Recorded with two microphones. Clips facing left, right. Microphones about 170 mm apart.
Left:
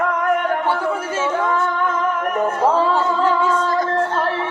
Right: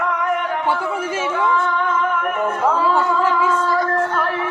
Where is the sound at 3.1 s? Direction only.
30° left (ahead or behind).